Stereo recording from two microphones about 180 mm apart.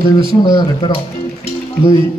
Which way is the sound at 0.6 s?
25° left (ahead or behind).